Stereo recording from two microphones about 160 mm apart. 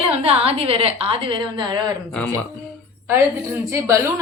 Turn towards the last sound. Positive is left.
turn(degrees=-20)  # may be behind; listen again after turning